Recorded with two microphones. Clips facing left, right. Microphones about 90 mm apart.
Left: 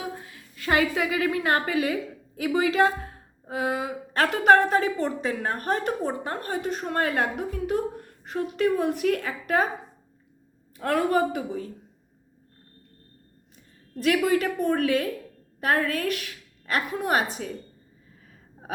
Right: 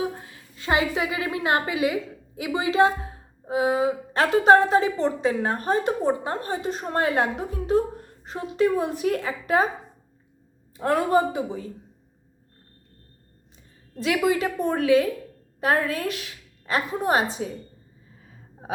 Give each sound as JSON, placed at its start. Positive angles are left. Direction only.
{"t": 0.2, "sound": "a woman's voice", "side_deg": -25}
{"t": 10.8, "sound": "a woman's voice", "side_deg": -20}
{"t": 13.9, "sound": "a woman's voice", "side_deg": -20}